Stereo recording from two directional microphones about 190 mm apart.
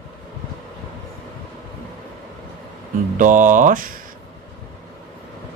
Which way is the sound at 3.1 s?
40° right (ahead or behind).